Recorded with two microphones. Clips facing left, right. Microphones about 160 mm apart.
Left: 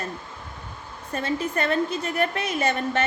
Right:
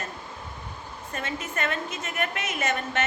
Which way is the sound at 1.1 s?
35° left (ahead or behind).